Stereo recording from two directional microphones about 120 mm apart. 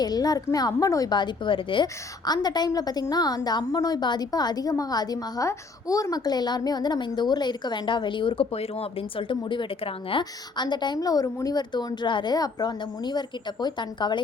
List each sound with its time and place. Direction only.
0.0 s a woman's voice: 35° left (ahead or behind)